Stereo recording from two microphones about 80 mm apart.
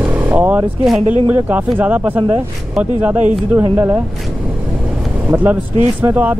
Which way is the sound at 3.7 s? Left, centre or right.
Right.